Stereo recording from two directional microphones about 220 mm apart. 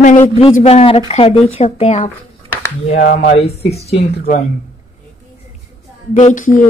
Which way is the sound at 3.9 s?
45° left (ahead or behind).